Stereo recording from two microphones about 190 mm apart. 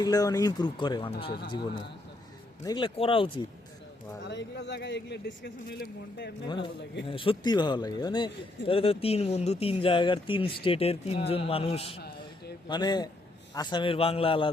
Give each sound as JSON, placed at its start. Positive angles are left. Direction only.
{"t": 0.0, "sound": "speech", "side_deg": 20}
{"t": 2.6, "sound": "speech", "side_deg": 25}
{"t": 4.3, "sound": "a man's voice", "side_deg": 65}
{"t": 7.1, "sound": "speech", "side_deg": 25}